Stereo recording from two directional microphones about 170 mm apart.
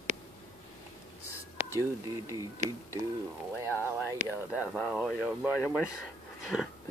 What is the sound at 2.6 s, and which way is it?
Speech, 45° right (ahead or behind).